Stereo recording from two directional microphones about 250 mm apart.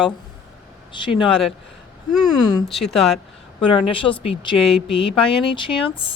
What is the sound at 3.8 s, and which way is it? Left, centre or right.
Speech, left.